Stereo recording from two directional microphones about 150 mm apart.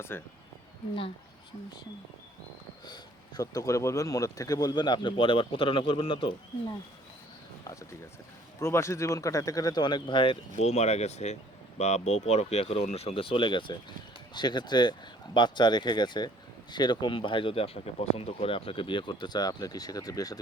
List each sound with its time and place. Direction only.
0.1 s speech: 15° left (ahead or behind)
2.8 s speech: 25° left (ahead or behind)
7.6 s speech: 25° left (ahead or behind)